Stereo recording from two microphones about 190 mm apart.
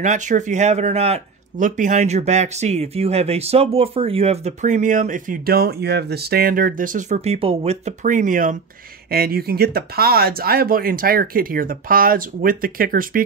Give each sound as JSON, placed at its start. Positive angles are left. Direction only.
{"t": 0.0, "sound": "speech", "side_deg": -40}